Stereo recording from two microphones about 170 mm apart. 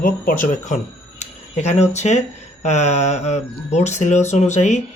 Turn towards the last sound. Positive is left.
turn(degrees=45)  # may be behind; listen again after turning